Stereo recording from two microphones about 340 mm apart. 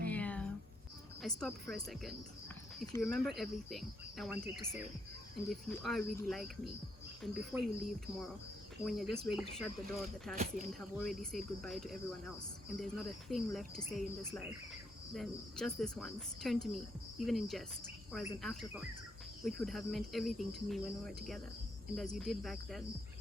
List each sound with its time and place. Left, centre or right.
0.1 s a sound: centre
1.2 s cricket: centre
5.5 s cricket: centre
10.3 s speech: right
10.8 s cricket: centre